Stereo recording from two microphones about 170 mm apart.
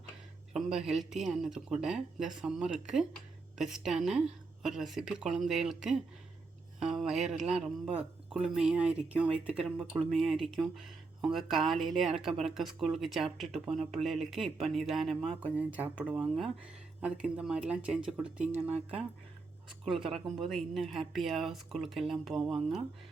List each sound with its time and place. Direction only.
0.5 s speech: 5° right (ahead or behind)
6.8 s music: 5° right (ahead or behind)
7.9 s speech: 5° right (ahead or behind)
18.7 s speech: 35° right (ahead or behind)
19.8 s speech: centre (ahead or behind)